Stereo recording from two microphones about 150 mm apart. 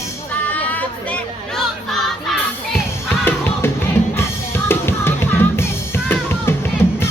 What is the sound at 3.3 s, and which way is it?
Music, 15° left (ahead or behind).